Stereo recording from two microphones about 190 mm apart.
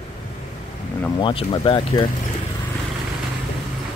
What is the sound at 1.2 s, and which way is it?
Speech, 25° left (ahead or behind).